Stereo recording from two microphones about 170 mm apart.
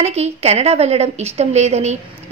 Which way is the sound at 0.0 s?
40° right (ahead or behind).